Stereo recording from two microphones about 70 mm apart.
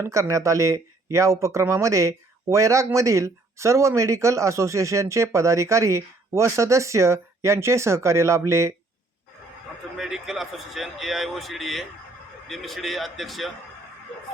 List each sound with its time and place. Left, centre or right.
0.0 s speech: right
10.0 s speech: centre